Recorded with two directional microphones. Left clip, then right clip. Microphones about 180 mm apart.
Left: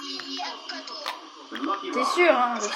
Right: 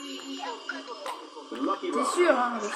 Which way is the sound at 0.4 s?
Centre (ahead or behind).